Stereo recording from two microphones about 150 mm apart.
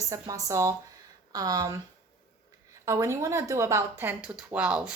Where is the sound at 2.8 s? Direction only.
20° right (ahead or behind).